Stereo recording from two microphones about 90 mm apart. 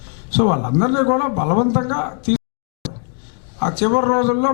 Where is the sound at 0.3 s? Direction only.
15° left (ahead or behind).